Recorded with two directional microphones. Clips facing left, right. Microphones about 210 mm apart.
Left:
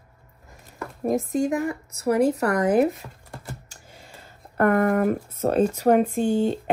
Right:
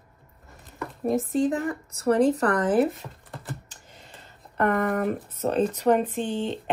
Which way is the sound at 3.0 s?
5° left (ahead or behind).